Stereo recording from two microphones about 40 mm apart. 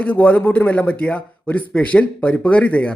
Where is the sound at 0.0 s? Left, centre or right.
Left.